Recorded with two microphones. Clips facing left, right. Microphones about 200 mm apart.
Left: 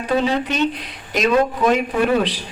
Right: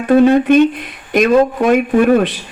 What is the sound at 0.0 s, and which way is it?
A man's voice, 50° right (ahead or behind).